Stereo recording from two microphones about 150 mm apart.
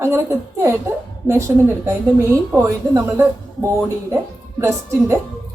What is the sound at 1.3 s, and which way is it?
Speech, 20° right (ahead or behind).